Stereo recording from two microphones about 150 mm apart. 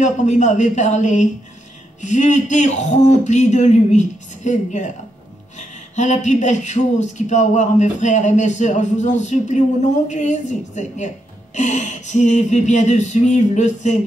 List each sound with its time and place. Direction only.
0.0 s speech: 55° left (ahead or behind)